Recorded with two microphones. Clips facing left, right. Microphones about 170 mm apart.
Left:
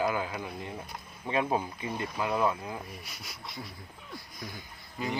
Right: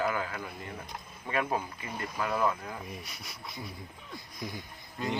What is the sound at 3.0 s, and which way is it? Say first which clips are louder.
Speech: even; centre (ahead or behind).